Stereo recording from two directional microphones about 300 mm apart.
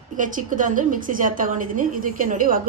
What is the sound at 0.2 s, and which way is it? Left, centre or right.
A woman's voice, right.